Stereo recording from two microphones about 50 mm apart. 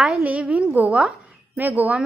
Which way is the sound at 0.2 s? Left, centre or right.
Right.